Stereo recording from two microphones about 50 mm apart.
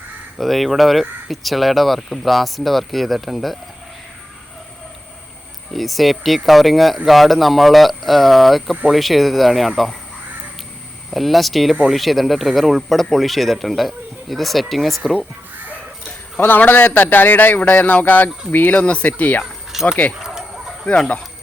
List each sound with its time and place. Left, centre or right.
0.3 s speech: centre
5.7 s speech: centre
11.1 s speech: centre
16.4 s a man's voice: left
19.7 s speech: centre
20.1 s chicken: centre